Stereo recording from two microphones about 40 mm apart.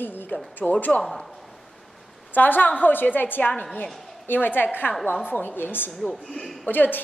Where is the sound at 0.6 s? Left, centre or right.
Left.